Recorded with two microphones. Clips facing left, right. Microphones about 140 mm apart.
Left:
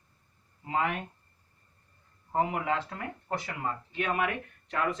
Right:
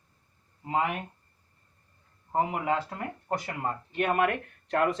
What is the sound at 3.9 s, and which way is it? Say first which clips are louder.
Speech: right 5 dB; 55° right (ahead or behind).